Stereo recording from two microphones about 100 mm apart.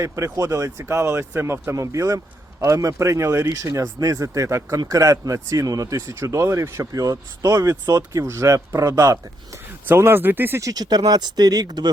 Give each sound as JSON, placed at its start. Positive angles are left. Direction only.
{"t": 0.0, "sound": "speech", "side_deg": -35}
{"t": 9.8, "sound": "speech", "side_deg": -20}
{"t": 10.6, "sound": "speech", "side_deg": -40}